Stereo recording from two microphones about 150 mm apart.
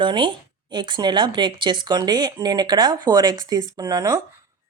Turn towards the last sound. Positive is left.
turn(degrees=-25)  # may be behind; listen again after turning